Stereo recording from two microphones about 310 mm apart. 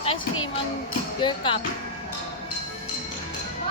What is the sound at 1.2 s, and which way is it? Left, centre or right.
Speech, centre.